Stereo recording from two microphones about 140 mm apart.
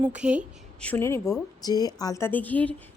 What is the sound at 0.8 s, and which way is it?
A woman's voice, 15° left (ahead or behind).